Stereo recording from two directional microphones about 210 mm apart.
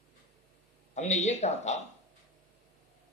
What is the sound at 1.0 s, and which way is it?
Speech, 35° left (ahead or behind).